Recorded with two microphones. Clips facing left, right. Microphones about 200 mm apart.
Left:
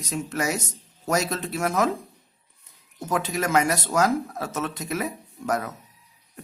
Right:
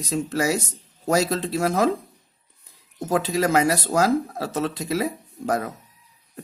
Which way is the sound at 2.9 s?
35° right (ahead or behind).